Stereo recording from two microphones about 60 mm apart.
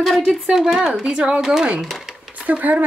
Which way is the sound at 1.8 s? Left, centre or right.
Centre.